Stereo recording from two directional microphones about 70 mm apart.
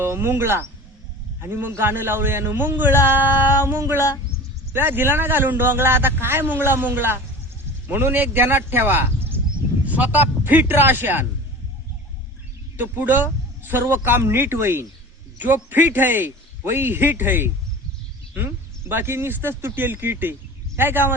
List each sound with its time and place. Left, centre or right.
0.0 s a man's voice: right
12.7 s a man's voice: right